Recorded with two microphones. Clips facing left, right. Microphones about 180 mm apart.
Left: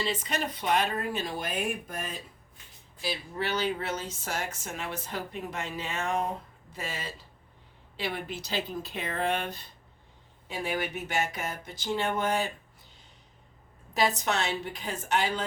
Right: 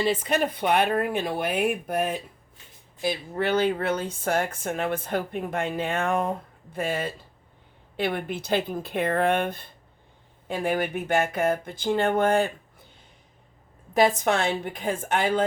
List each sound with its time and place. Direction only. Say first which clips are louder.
0.0 s speech: right 8 dB; 55° right (ahead or behind)
13.9 s a woman's voice: right 6 dB; 50° right (ahead or behind)